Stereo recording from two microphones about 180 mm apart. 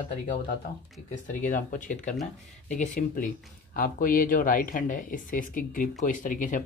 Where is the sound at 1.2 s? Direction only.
45° left (ahead or behind).